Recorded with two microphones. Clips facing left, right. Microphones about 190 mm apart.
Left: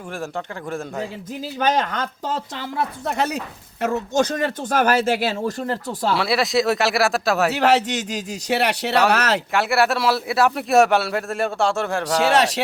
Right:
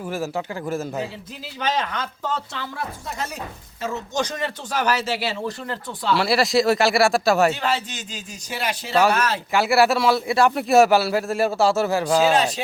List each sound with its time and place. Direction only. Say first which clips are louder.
0.1 s speech: right 2 dB; 5° right (ahead or behind)
1.5 s speech: left 4 dB; 50° left (ahead or behind)
3.1 s speech: left 7 dB; 70° left (ahead or behind); by 6.1 s 40° left (ahead or behind)
6.1 s speech: right 2 dB; centre (ahead or behind)
7.5 s a man's voice: left 7 dB; 80° left
9.5 s speech: right 4 dB; centre (ahead or behind)
12.2 s speech: left 1 dB; 75° left (ahead or behind)